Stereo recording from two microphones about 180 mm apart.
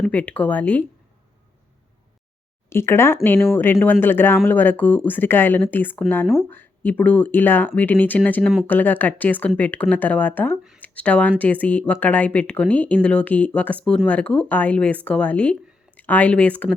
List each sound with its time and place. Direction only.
0.0 s speech: 5° left (ahead or behind)
2.6 s speech: 15° left (ahead or behind)
6.2 s speech: centre (ahead or behind)
6.5 s speech: 10° left (ahead or behind)